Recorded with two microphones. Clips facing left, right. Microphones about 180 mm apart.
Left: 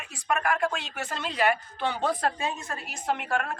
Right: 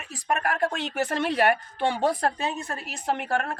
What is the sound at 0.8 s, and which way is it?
Speech, 60° right (ahead or behind).